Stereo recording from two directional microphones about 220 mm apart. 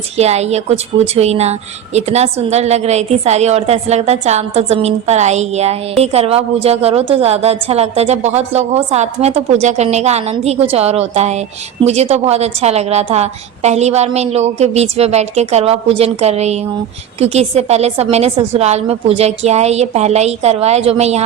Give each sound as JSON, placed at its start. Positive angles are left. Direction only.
{"t": 0.2, "sound": "a woman's voice", "side_deg": -30}